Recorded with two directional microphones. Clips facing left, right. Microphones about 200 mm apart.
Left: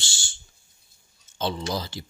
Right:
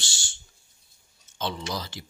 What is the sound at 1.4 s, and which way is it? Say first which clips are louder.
Speech: left 4 dB; 30° left (ahead or behind).